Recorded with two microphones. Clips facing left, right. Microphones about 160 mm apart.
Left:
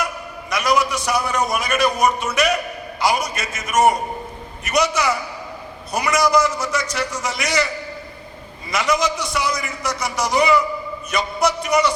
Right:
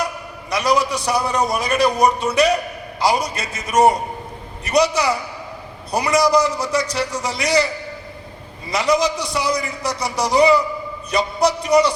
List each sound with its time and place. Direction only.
0.5 s a man's voice: 30° right (ahead or behind)
8.7 s a man's voice: 35° right (ahead or behind)